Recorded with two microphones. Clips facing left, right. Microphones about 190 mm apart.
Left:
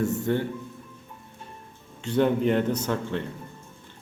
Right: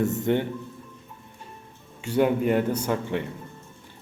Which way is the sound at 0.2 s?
20° right (ahead or behind).